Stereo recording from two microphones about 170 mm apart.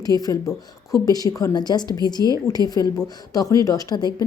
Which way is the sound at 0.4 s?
Centre (ahead or behind).